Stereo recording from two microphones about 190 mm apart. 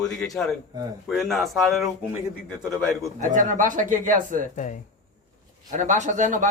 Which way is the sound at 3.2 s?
40° right (ahead or behind).